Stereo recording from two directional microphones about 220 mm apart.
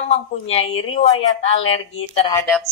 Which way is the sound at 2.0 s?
25° left (ahead or behind).